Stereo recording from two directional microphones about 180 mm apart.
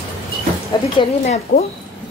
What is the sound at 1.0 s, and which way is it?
Speech, 35° left (ahead or behind).